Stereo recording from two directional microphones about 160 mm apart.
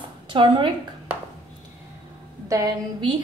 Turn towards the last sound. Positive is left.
turn(degrees=-20)  # may be behind; listen again after turning